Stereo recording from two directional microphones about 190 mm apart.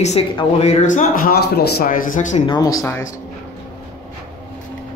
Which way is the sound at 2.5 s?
20° left (ahead or behind).